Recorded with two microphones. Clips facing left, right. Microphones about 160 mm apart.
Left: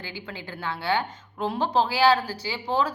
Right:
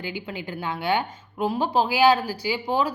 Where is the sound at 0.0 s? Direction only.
15° right (ahead or behind).